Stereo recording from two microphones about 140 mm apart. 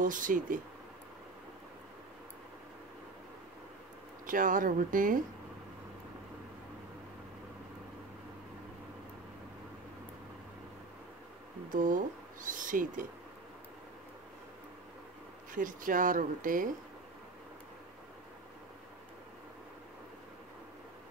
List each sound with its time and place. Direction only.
0.0 s speech: 75° right (ahead or behind)
4.3 s speech: 75° right (ahead or behind)
11.7 s speech: 70° right (ahead or behind)
15.5 s speech: 75° right (ahead or behind)